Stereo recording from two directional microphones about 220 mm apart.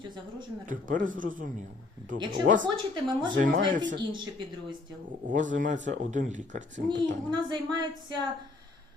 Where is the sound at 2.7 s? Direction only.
20° right (ahead or behind).